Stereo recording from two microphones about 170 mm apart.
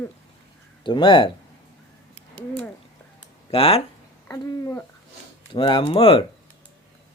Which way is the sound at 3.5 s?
35° left (ahead or behind).